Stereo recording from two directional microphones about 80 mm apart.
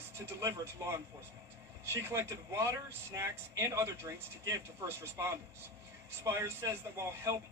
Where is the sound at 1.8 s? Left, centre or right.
Right.